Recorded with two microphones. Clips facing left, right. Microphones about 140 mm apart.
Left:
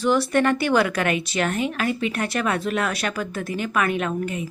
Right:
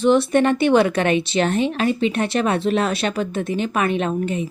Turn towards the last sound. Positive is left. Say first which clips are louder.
# right 3 dB
turn(degrees=-25)  # may be behind; listen again after turning